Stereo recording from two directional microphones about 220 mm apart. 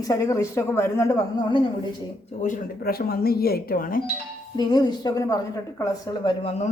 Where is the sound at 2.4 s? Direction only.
40° left (ahead or behind).